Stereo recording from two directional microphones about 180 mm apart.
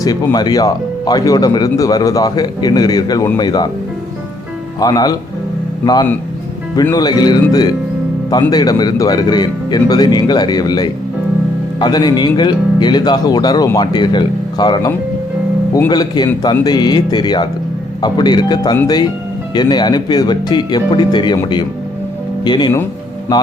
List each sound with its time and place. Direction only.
0.0 s speech: 20° left (ahead or behind)
4.8 s speech: 20° left (ahead or behind)